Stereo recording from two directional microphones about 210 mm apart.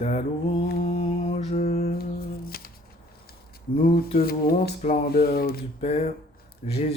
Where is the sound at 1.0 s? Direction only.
30° left (ahead or behind).